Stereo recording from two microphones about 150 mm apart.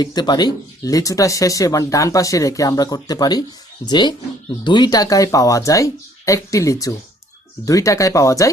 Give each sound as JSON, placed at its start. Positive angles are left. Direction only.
{"t": 0.0, "sound": "speech", "side_deg": 25}